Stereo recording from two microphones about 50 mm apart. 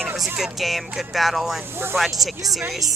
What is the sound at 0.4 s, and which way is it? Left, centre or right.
Speech, centre.